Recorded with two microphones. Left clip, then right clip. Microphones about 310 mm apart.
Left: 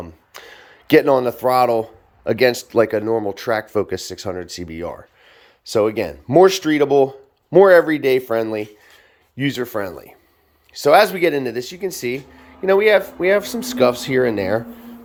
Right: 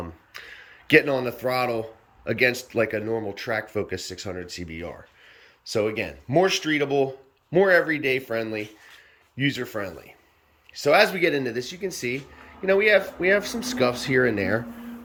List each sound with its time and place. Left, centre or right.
0.3 s a man's voice: centre